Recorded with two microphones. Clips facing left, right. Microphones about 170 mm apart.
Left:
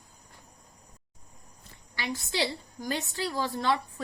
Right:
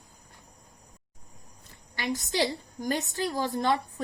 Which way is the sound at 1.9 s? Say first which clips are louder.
Right 3 dB; 45° right (ahead or behind).